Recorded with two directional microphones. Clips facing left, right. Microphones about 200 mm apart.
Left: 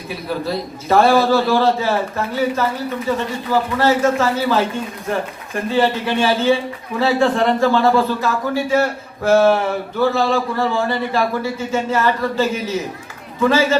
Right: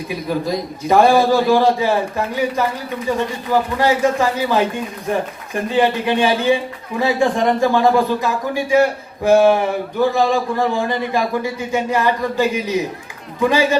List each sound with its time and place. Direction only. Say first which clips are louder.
0.1 s speech: right 1 dB; 15° right (ahead or behind)